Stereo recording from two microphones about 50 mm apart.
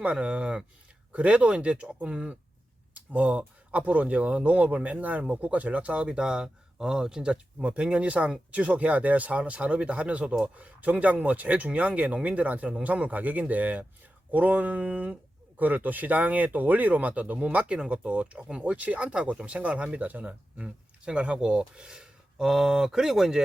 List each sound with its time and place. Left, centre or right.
0.0 s speech: right; by 23.4 s centre